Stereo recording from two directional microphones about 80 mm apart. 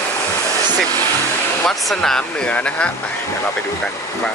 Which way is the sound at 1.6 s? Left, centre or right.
Centre.